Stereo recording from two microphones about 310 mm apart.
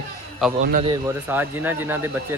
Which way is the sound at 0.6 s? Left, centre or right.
Right.